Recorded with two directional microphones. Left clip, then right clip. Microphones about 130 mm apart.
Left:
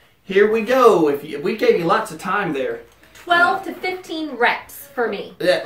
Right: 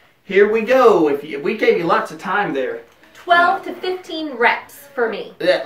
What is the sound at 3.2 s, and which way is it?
A woman's voice, 10° right (ahead or behind).